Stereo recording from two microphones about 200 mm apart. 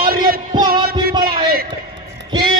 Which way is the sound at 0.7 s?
50° right (ahead or behind).